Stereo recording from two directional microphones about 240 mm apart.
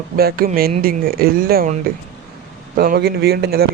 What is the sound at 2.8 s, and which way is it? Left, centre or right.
Speech, right.